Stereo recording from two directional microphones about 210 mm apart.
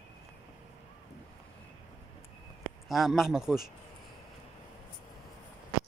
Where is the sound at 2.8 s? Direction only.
Centre (ahead or behind).